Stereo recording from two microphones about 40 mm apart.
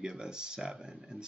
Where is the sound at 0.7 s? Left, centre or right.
Centre.